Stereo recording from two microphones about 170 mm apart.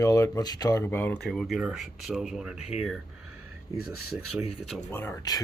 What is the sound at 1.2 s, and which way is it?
Speech, centre (ahead or behind).